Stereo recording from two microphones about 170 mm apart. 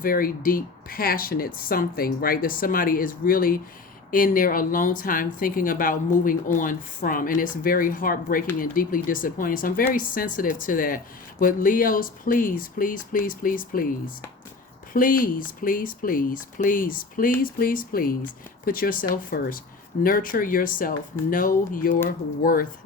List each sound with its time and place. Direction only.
0.0 s speech: 55° left (ahead or behind)
14.9 s speech: 55° left (ahead or behind)